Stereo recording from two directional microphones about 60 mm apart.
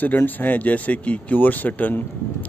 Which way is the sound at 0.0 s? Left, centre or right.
Left.